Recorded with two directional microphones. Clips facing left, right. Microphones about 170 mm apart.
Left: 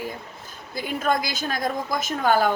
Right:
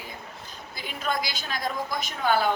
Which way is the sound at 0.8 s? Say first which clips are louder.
Left 6 dB; 50° left (ahead or behind).